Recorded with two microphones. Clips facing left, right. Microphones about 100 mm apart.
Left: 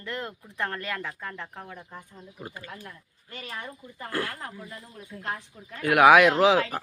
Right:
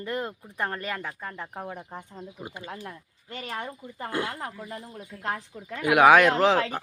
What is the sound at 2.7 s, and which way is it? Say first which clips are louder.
Speech: right 4 dB; 30° right (ahead or behind).